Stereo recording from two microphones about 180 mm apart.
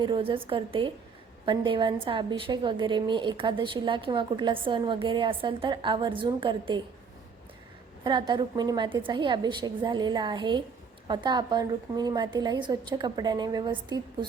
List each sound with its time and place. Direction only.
0.0 s a woman's voice: 25° right (ahead or behind)
8.0 s a woman's voice: 25° right (ahead or behind)